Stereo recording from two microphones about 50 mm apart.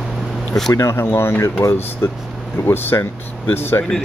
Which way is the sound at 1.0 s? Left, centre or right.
Left.